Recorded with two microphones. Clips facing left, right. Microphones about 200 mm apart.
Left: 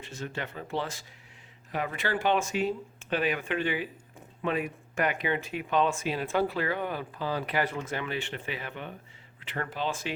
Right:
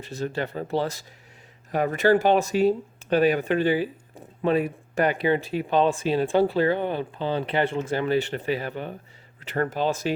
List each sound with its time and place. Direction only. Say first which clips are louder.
0.0 s speech: right 8 dB; 35° right (ahead or behind)